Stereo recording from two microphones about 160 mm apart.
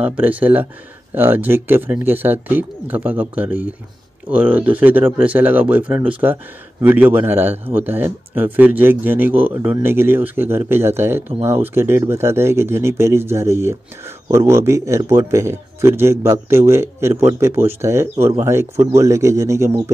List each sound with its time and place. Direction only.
0.0 s speech: 10° right (ahead or behind)